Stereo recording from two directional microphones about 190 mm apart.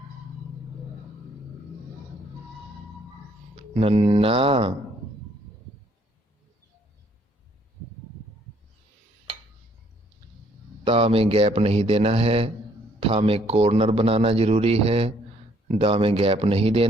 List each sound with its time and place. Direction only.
3.8 s speech: 30° right (ahead or behind)
10.8 s a man's voice: 30° right (ahead or behind)